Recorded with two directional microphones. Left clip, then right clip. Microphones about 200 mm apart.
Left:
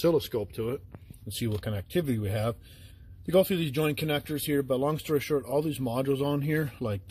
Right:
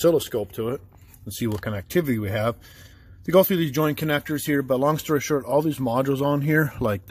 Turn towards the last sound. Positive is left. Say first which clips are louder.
# right 9 dB
turn(degrees=-25)  # may be behind; listen again after turning